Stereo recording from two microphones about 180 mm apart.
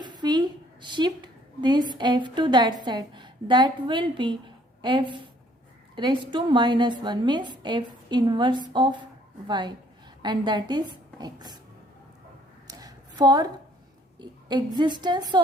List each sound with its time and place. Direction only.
0.0 s a woman's voice: 25° right (ahead or behind)
12.6 s a sound: 20° right (ahead or behind)
14.2 s a woman's voice: 25° right (ahead or behind)